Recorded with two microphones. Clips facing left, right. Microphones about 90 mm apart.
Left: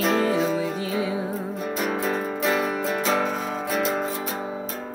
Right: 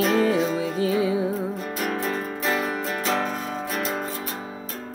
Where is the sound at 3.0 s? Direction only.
5° left (ahead or behind).